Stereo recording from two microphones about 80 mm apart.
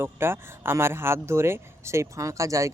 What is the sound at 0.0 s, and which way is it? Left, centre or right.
Speech, right.